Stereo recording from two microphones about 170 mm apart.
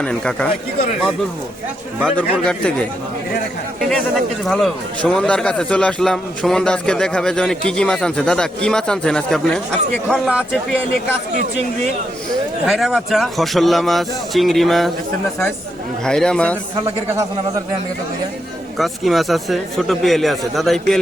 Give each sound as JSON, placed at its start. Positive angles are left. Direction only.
{"t": 0.0, "sound": "a man's voice", "side_deg": 5}
{"t": 2.4, "sound": "a man's voice", "side_deg": 5}
{"t": 4.4, "sound": "a man's voice", "side_deg": 0}
{"t": 12.6, "sound": "a man's voice", "side_deg": 0}
{"t": 16.0, "sound": "a man's voice", "side_deg": 5}
{"t": 16.8, "sound": "a man's voice", "side_deg": -15}
{"t": 18.8, "sound": "a man's voice", "side_deg": 0}